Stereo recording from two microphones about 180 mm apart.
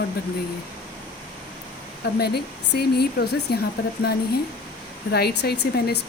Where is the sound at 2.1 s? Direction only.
60° left (ahead or behind).